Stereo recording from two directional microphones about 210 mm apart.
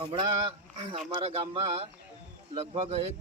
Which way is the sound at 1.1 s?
25° right (ahead or behind).